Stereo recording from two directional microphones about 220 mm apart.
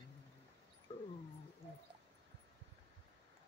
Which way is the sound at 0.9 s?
30° left (ahead or behind).